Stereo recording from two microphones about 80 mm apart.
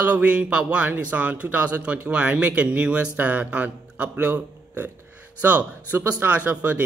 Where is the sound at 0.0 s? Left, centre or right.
Centre.